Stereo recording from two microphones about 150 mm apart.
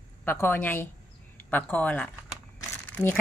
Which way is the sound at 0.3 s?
15° left (ahead or behind).